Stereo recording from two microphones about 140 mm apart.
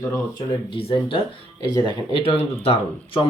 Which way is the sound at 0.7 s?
40° left (ahead or behind).